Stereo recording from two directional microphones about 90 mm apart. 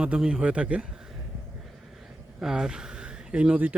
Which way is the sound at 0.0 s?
10° right (ahead or behind).